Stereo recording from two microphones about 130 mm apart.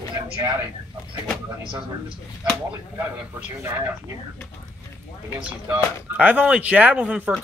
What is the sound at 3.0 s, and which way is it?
Speech, 15° right (ahead or behind).